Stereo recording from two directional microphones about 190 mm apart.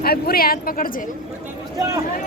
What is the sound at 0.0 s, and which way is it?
Speech, 55° left (ahead or behind).